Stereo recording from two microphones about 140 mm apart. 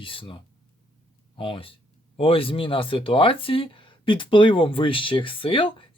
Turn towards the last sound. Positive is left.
turn(degrees=35)  # may be behind; listen again after turning